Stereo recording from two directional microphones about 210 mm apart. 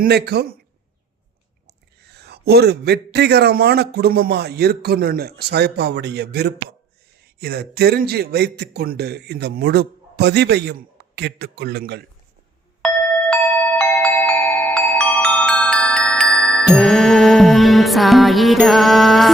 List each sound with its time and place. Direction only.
0.0 s a man's voice: 50° right (ahead or behind)
1.6 s a man's voice: 50° right (ahead or behind)
13.3 s glockenspiel: 5° left (ahead or behind)
14.9 s music: 5° left (ahead or behind)